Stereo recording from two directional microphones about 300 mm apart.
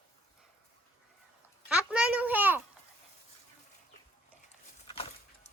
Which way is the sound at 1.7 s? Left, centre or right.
Centre.